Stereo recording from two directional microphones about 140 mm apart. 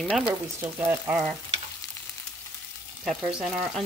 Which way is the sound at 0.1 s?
15° right (ahead or behind).